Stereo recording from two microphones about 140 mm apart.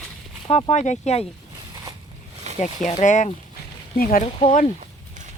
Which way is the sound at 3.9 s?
90° left.